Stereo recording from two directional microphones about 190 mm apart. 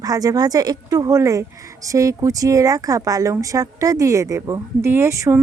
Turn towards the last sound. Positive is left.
turn(degrees=-15)  # may be behind; listen again after turning